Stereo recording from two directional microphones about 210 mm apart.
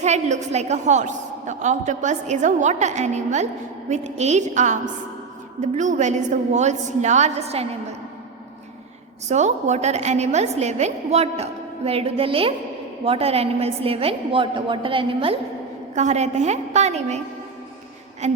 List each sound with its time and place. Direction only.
0.0 s a woman's voice: 35° right (ahead or behind)
9.3 s a woman's voice: 35° right (ahead or behind)